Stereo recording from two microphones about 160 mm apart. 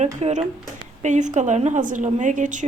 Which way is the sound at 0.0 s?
45° right (ahead or behind).